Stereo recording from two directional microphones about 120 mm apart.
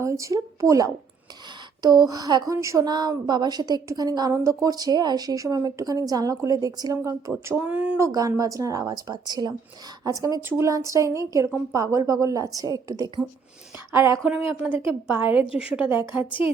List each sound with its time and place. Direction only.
0.0 s a woman's voice: 25° right (ahead or behind)
14.3 s speech: 10° right (ahead or behind)